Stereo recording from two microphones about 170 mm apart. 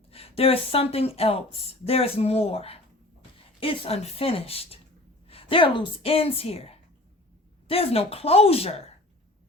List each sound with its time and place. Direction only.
0.1 s speech: 35° left (ahead or behind)